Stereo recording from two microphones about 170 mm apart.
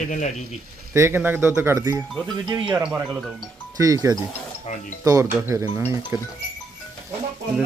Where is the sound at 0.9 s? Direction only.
15° right (ahead or behind).